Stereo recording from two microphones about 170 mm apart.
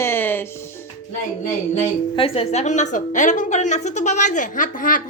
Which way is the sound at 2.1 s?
35° left (ahead or behind).